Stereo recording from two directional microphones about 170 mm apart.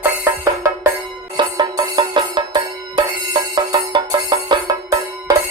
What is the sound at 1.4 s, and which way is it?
Music, 25° right (ahead or behind).